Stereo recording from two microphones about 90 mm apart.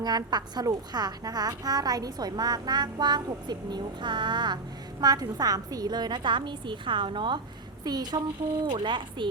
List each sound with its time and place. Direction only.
0.0 s a woman's voice: 50° right (ahead or behind)
7.9 s a woman's voice: 50° right (ahead or behind)
8.6 s speech: 60° right (ahead or behind)